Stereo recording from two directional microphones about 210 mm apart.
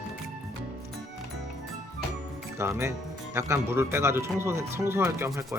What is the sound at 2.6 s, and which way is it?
Speech, 10° right (ahead or behind).